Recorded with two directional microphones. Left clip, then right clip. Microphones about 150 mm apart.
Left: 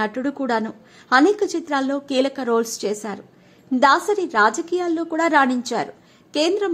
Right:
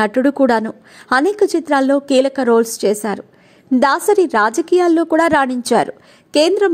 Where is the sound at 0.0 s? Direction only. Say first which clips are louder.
Right 10 dB; 40° right (ahead or behind).